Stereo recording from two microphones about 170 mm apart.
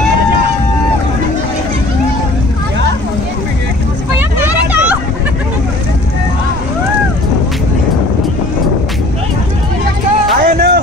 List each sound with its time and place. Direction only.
4.5 s vehicle: 10° right (ahead or behind)
10.4 s music: 70° right (ahead or behind)